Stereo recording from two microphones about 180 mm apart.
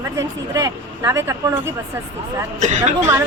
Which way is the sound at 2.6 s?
40° right (ahead or behind).